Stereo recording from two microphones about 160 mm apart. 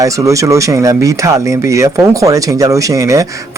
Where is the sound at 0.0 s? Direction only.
20° right (ahead or behind).